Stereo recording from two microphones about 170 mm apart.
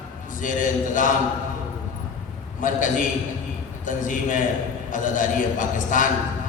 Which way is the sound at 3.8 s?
50° left (ahead or behind).